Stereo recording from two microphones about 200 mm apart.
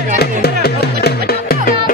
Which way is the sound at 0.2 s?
55° left (ahead or behind).